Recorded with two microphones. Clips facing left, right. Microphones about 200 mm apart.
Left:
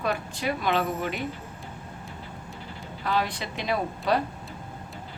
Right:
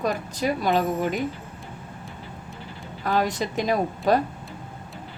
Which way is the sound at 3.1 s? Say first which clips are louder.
Right 4 dB; 45° right (ahead or behind).